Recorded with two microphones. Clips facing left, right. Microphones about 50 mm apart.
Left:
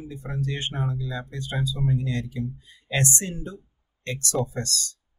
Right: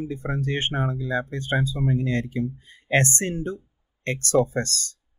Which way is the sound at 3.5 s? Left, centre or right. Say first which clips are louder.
Right 2 dB; right.